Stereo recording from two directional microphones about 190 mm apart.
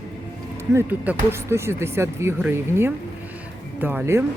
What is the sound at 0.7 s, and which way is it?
Speech, 10° right (ahead or behind).